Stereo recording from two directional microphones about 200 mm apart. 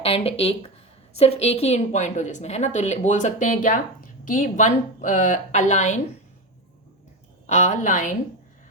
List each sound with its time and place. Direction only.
0.0 s a woman's voice: 30° left (ahead or behind)
7.4 s a woman's voice: 35° left (ahead or behind)